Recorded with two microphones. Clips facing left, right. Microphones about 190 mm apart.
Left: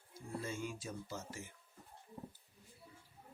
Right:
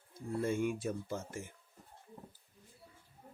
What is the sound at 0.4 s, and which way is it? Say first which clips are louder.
Speech: right 12 dB; 60° right (ahead or behind).